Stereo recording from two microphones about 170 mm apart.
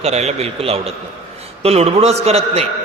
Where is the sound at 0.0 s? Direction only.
40° right (ahead or behind).